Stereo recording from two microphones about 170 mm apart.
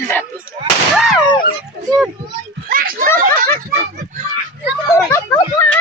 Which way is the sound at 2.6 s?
55° right (ahead or behind).